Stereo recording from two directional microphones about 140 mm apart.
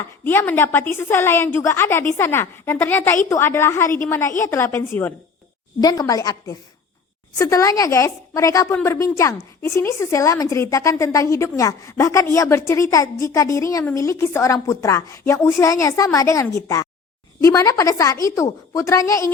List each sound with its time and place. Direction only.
0.3 s a woman's voice: 15° left (ahead or behind)
5.8 s a woman's voice: 25° left (ahead or behind)